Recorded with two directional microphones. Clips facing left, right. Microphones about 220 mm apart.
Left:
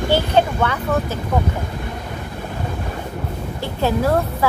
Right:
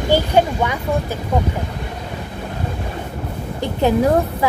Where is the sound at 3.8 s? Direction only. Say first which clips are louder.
Right 3 dB; 15° right (ahead or behind).